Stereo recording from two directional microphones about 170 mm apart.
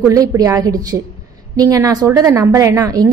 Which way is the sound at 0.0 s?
20° right (ahead or behind).